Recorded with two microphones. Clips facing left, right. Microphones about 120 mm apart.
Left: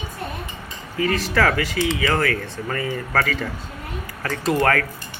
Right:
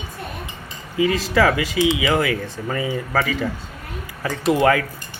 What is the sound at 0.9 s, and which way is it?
Speech, 15° right (ahead or behind).